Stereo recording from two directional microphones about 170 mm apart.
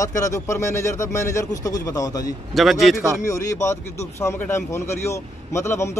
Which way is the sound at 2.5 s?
Centre (ahead or behind).